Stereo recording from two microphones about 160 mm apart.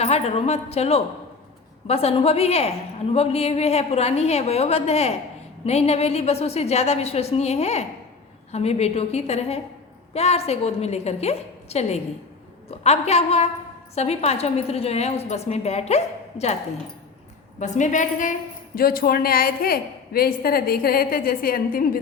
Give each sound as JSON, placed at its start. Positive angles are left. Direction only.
{"t": 0.0, "sound": "a woman's voice", "side_deg": 40}
{"t": 17.6, "sound": "a woman's voice", "side_deg": 50}